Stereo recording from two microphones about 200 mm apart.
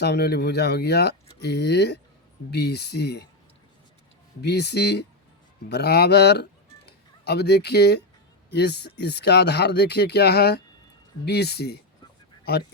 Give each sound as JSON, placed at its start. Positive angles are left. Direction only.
{"t": 0.0, "sound": "speech", "side_deg": 55}
{"t": 4.4, "sound": "speech", "side_deg": 55}